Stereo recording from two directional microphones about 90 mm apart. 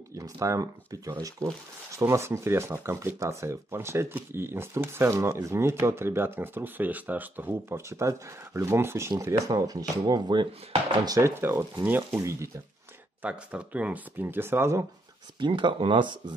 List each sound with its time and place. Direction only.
0.1 s speech: 35° right (ahead or behind)
7.7 s speech: 35° right (ahead or behind)
9.1 s speech: 45° right (ahead or behind); by 11.0 s 70° right (ahead or behind)
11.1 s speech: 35° right (ahead or behind)
13.2 s speech: 15° right (ahead or behind)
14.2 s speech: 25° right (ahead or behind)
15.3 s speech: 60° right (ahead or behind)